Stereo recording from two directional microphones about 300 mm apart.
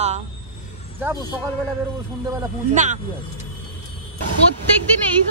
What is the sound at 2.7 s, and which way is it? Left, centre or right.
Speech, right.